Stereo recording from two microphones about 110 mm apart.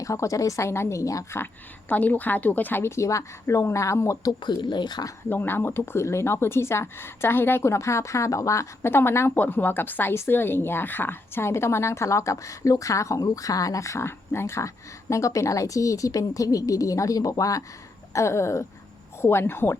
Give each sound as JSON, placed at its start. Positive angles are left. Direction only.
{"t": 0.0, "sound": "speech", "side_deg": 30}
{"t": 1.9, "sound": "speech", "side_deg": 15}
{"t": 5.3, "sound": "speech", "side_deg": 20}